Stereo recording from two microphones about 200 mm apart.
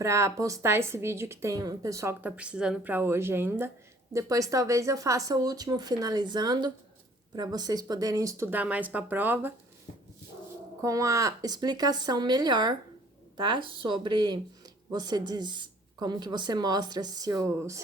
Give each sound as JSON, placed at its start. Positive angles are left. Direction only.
{"t": 0.0, "sound": "a woman's voice", "side_deg": -15}
{"t": 10.8, "sound": "a woman's voice", "side_deg": -15}